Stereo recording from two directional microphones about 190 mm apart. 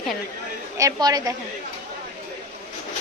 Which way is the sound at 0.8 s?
20° right (ahead or behind).